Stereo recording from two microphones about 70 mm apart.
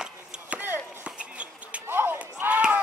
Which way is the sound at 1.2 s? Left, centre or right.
Centre.